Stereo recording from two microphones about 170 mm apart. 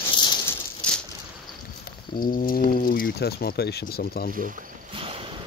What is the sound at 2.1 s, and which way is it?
Speech, 55° left (ahead or behind).